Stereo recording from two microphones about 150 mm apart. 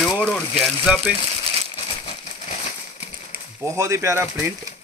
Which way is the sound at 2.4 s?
50° left (ahead or behind).